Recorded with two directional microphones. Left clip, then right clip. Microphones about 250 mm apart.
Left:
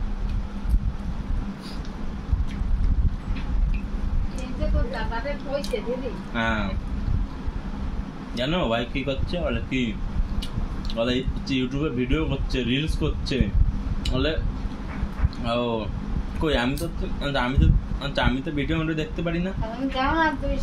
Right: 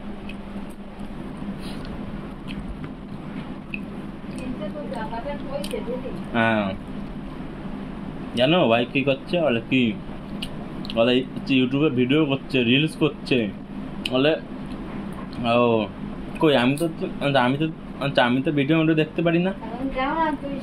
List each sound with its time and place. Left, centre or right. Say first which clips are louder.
6.3 s a man's voice: right 5 dB; centre
8.4 s a man's voice: right 6 dB; centre
11.0 s a man's voice: right 6 dB; centre
15.4 s a man's voice: right 6 dB; centre